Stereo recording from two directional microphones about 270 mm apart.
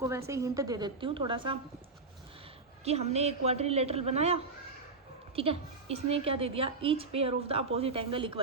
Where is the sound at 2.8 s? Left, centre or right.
Right.